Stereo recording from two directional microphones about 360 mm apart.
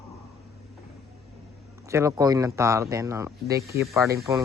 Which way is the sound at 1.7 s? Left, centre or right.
Centre.